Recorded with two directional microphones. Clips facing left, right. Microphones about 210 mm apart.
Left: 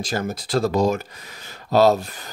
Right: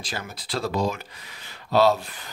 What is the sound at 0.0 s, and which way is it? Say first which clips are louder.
Speech: left 9 dB; 45° left (ahead or behind).